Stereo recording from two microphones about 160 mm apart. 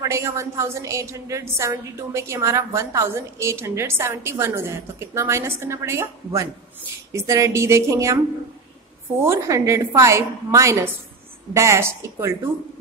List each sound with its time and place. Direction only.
0.0 s a woman's voice: 20° right (ahead or behind)
9.2 s a woman's voice: 15° right (ahead or behind)